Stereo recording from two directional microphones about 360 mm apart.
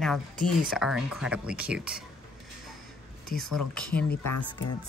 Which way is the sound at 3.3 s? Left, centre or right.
Centre.